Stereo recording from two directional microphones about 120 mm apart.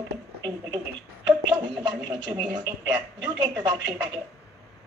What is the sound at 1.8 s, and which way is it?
A woman's voice, 35° right (ahead or behind).